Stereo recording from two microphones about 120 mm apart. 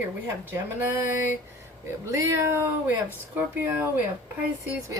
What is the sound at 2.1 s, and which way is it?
Speech, 25° right (ahead or behind).